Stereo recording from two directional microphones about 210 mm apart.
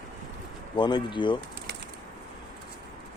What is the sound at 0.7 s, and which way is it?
Speech, 20° left (ahead or behind).